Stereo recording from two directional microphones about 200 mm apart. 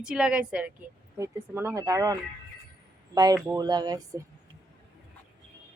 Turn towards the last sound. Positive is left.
turn(degrees=-20)  # may be behind; listen again after turning